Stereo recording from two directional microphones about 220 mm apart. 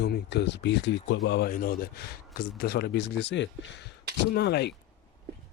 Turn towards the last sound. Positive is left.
turn(degrees=50)  # may be behind; listen again after turning